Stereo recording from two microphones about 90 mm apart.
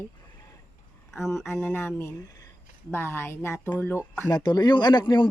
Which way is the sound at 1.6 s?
25° left (ahead or behind).